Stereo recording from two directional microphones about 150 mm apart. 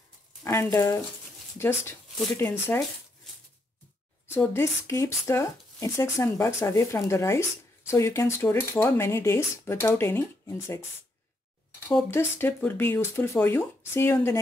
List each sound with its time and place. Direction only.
0.4 s speech: 20° left (ahead or behind)
4.3 s speech: 15° left (ahead or behind)
12.1 s speech: 15° left (ahead or behind)